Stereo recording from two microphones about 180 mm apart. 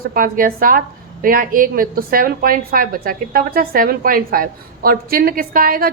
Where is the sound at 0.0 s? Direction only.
50° right (ahead or behind).